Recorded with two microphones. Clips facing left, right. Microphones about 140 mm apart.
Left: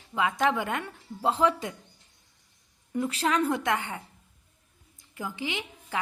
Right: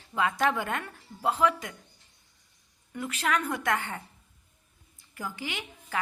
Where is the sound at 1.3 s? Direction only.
30° left (ahead or behind).